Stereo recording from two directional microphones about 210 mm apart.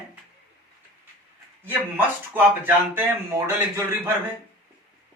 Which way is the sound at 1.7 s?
10° right (ahead or behind).